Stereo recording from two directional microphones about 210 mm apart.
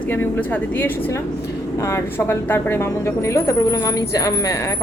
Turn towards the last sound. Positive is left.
turn(degrees=15)  # may be behind; listen again after turning